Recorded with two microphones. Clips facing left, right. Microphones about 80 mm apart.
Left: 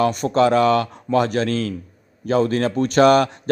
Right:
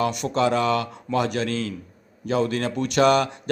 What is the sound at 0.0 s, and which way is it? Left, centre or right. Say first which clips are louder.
A man's voice: left 5 dB; left.